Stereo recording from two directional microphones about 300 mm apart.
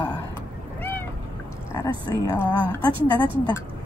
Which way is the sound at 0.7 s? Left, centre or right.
Centre.